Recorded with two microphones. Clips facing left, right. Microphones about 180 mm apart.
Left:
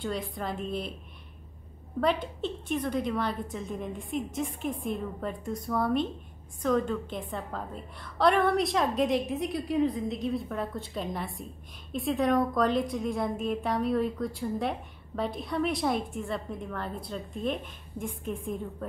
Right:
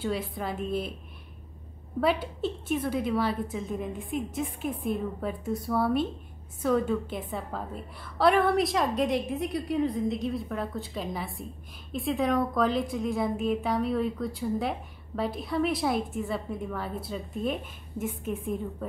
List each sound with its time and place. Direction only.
0.0 s a woman's voice: 5° right (ahead or behind)
2.0 s a woman's voice: 5° right (ahead or behind)